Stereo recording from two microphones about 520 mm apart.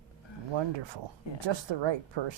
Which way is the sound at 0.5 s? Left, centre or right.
Right.